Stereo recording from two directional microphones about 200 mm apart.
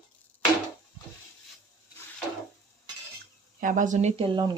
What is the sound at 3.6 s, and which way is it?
Speech, 40° right (ahead or behind).